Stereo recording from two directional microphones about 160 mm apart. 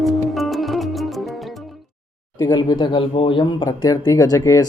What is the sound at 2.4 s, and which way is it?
Speech, 25° left (ahead or behind).